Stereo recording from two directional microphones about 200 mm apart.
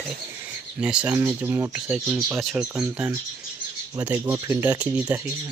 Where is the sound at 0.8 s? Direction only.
5° right (ahead or behind).